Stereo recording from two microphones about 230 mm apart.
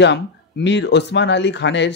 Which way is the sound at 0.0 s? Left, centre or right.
Left.